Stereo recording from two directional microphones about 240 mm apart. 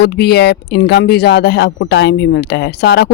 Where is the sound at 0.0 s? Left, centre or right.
Left.